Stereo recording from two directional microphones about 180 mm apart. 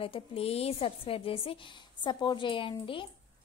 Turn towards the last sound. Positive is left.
turn(degrees=30)  # may be behind; listen again after turning